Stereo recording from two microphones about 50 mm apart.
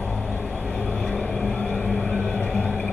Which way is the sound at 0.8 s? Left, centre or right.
Centre.